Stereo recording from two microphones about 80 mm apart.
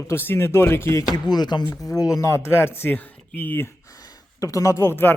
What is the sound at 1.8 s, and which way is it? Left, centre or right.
Speech, left.